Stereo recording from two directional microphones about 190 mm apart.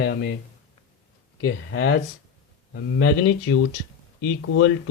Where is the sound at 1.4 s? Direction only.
60° left (ahead or behind).